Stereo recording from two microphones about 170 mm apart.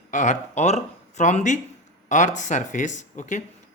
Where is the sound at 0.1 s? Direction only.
45° left (ahead or behind).